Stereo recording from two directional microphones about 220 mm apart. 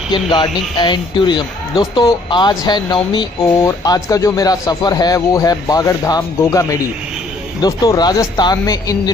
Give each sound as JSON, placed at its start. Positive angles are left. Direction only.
{"t": 0.3, "sound": "speech", "side_deg": 20}